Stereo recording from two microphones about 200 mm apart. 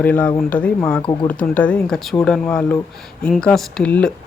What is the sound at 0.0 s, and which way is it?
A man's voice, 10° left (ahead or behind).